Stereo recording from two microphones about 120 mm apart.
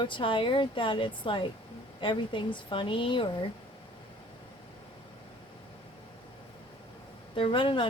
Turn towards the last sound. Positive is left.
turn(degrees=45)  # may be behind; listen again after turning